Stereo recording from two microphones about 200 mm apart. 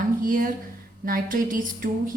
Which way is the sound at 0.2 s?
45° right (ahead or behind).